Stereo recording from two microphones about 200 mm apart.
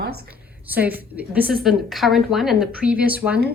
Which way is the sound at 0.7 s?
10° right (ahead or behind).